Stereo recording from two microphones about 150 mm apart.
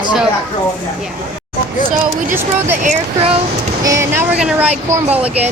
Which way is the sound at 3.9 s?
15° right (ahead or behind).